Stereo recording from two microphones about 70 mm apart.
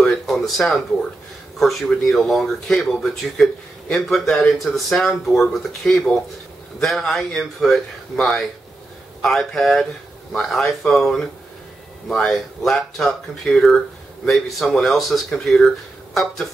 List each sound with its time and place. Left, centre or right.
0.0 s speech: centre